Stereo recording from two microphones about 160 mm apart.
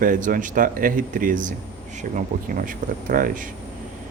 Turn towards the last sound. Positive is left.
turn(degrees=-60)  # may be behind; listen again after turning